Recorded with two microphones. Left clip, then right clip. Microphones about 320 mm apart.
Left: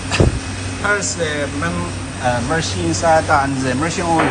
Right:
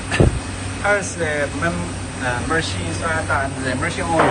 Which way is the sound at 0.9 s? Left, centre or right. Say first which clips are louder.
Left 1 dB; centre.